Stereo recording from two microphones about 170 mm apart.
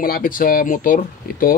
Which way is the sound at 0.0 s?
60° left (ahead or behind).